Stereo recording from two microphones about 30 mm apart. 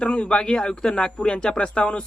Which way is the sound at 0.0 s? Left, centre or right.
Left.